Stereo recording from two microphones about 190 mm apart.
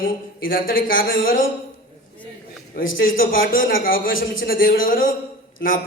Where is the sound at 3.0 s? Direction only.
50° left (ahead or behind).